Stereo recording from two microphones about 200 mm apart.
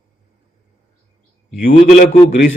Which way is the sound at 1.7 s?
35° left (ahead or behind).